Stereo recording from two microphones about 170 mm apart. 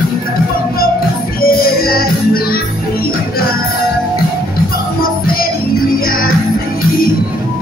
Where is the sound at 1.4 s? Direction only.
60° left (ahead or behind).